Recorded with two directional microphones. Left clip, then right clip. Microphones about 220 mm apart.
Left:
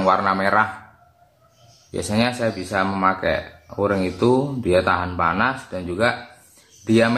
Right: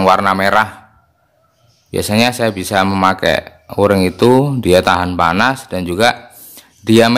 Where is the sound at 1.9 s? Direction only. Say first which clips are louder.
Right 8 dB; 45° right (ahead or behind).